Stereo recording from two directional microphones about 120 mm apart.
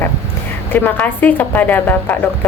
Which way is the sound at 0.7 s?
15° left (ahead or behind).